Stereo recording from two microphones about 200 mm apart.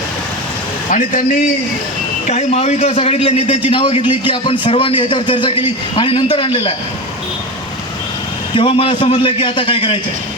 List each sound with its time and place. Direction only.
0.9 s a man's voice: 40° left (ahead or behind)
2.2 s a man's voice: 35° left (ahead or behind)
8.5 s a man's voice: 25° left (ahead or behind)